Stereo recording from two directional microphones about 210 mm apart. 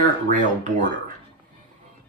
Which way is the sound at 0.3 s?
35° right (ahead or behind).